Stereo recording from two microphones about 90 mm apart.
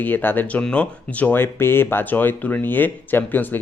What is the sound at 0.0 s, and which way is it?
Speech, 20° left (ahead or behind).